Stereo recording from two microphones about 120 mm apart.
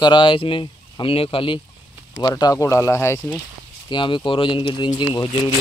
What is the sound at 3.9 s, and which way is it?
Speech, 40° left (ahead or behind).